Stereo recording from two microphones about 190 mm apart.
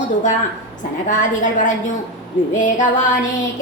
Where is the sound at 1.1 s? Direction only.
40° left (ahead or behind).